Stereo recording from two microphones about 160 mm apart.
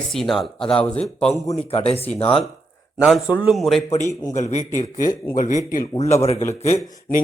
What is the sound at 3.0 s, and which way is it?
Speech, 5° right (ahead or behind).